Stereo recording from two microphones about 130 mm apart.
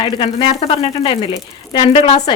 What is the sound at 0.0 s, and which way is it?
Speech, 40° left (ahead or behind).